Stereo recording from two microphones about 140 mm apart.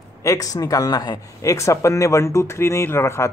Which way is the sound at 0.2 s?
25° left (ahead or behind).